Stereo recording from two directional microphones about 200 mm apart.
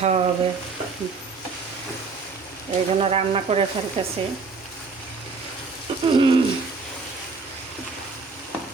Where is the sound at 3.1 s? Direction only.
30° right (ahead or behind).